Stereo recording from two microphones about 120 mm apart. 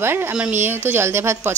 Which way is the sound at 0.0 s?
20° right (ahead or behind).